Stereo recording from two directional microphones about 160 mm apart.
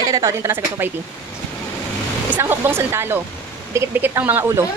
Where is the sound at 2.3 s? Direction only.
15° right (ahead or behind).